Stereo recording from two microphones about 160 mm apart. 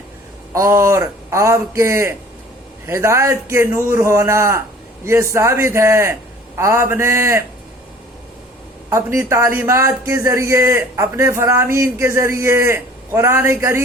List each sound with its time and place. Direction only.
0.5 s speech: 20° right (ahead or behind)
8.9 s speech: 15° right (ahead or behind)